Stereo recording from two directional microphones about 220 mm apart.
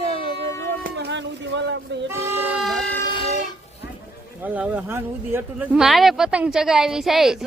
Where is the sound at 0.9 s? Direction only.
50° right (ahead or behind).